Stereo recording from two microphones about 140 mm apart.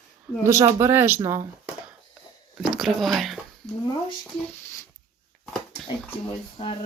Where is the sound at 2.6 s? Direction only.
Centre (ahead or behind).